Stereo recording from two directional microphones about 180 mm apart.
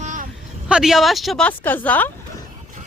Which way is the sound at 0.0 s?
45° right (ahead or behind).